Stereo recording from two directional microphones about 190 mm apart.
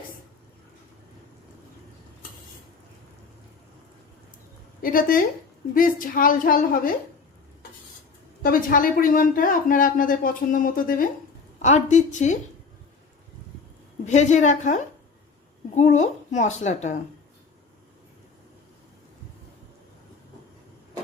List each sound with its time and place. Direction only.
4.8 s speech: 50° left (ahead or behind)
8.4 s a woman's voice: 50° left (ahead or behind)
14.0 s a woman's voice: 40° left (ahead or behind)